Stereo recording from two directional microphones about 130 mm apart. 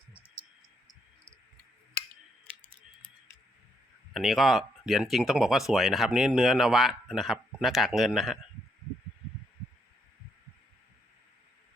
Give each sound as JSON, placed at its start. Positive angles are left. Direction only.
{"t": 4.1, "sound": "speech", "side_deg": 0}